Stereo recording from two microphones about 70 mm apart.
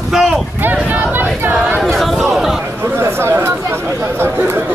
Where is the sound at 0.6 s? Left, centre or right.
Right.